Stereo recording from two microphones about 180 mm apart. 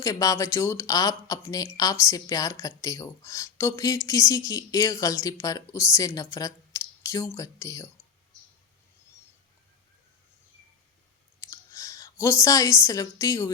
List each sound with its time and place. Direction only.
0.0 s speech: 20° left (ahead or behind)
11.3 s speech: 15° left (ahead or behind)